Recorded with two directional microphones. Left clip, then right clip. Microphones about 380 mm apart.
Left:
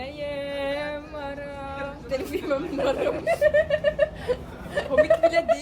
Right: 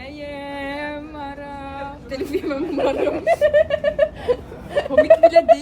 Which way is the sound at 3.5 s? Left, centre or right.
Right.